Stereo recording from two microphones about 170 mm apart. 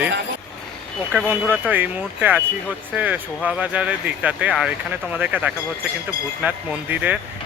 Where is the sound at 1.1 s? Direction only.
5° right (ahead or behind).